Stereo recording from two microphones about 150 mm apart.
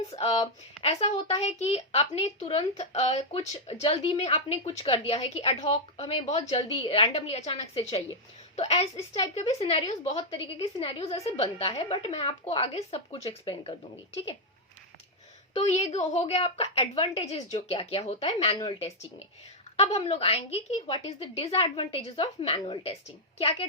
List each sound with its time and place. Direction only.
0.8 s a woman's voice: 45° left (ahead or behind)
9.0 s a woman's voice: 20° left (ahead or behind)
9.3 s a woman's voice: 45° left (ahead or behind)
15.5 s a woman's voice: 45° left (ahead or behind)
18.6 s a woman's voice: 35° left (ahead or behind)